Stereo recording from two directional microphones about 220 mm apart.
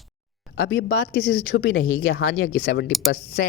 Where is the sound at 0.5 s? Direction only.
65° left (ahead or behind).